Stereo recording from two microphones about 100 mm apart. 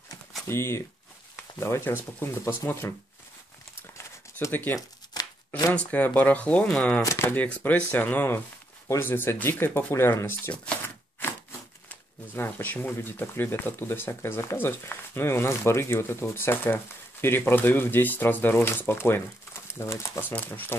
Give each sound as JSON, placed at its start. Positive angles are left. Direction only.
{"t": 0.5, "sound": "speech", "side_deg": 25}
{"t": 4.0, "sound": "a sound", "side_deg": 25}
{"t": 5.2, "sound": "tearing", "side_deg": 40}
{"t": 5.7, "sound": "speech", "side_deg": 15}
{"t": 7.0, "sound": "speech", "side_deg": 30}
{"t": 7.2, "sound": "speech", "side_deg": 15}
{"t": 11.2, "sound": "a sound", "side_deg": 20}
{"t": 11.9, "sound": "speech", "side_deg": 20}